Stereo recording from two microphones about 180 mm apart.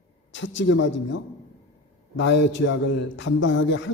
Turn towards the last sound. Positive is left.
turn(degrees=90)